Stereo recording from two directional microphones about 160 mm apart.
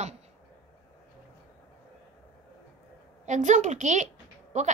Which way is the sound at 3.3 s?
50° right (ahead or behind).